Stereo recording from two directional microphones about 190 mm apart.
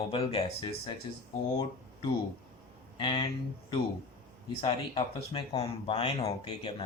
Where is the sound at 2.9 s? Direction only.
25° left (ahead or behind).